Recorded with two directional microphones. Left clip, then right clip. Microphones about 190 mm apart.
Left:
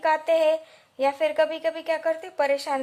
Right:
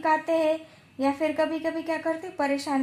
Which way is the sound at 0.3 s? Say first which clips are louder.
Left 3 dB; 90° left.